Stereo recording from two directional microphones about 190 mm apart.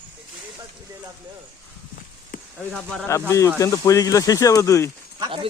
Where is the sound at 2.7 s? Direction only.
5° left (ahead or behind).